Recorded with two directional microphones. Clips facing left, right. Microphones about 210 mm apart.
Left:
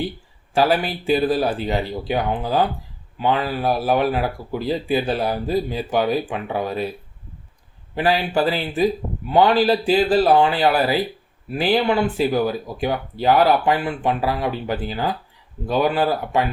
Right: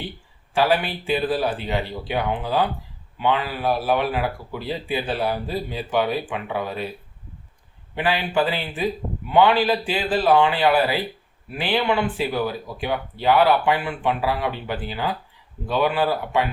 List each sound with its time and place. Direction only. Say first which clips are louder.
0.5 s speech: left 2 dB; 40° left (ahead or behind)
7.9 s speech: left 3 dB; 40° left (ahead or behind)